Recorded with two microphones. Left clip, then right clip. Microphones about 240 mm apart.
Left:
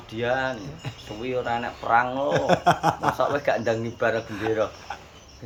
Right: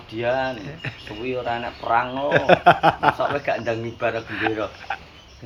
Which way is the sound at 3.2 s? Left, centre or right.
Left.